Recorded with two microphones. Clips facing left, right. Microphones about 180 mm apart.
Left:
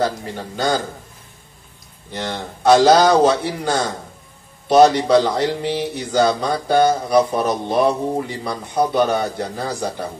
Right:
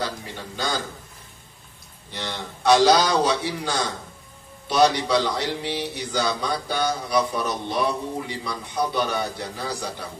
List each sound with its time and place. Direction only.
0.0 s speech: 45° left (ahead or behind)
2.1 s speech: 45° left (ahead or behind)